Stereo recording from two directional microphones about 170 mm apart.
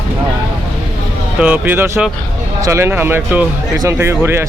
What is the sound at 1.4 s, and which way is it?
Speech, 10° right (ahead or behind).